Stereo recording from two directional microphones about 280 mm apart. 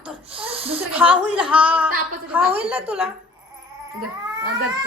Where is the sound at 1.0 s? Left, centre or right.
Centre.